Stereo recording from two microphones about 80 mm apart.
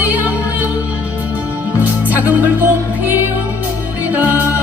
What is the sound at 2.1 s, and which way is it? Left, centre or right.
Music, centre.